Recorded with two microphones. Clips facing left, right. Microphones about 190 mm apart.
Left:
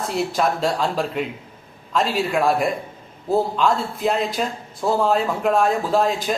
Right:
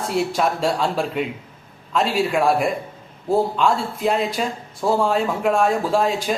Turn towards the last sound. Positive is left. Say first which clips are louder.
# even
turn(degrees=0)  # may be behind; listen again after turning